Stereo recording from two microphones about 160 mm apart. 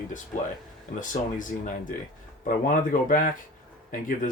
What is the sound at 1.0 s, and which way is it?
Speech, 55° left (ahead or behind).